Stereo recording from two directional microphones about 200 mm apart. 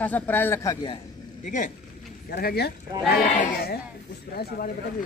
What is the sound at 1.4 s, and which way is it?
Speech, 40° left (ahead or behind).